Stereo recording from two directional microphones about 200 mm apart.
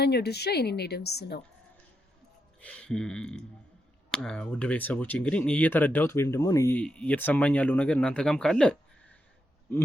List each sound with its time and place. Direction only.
0.0 s speech: 55° left (ahead or behind)
2.6 s a sound: 5° left (ahead or behind)
4.1 s speech: 5° left (ahead or behind)